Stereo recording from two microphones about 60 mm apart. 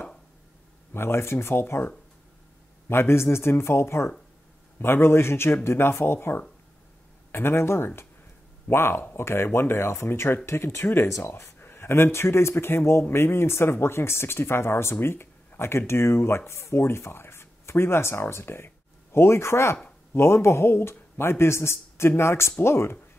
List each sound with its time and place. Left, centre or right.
0.9 s speech: left
2.9 s speech: left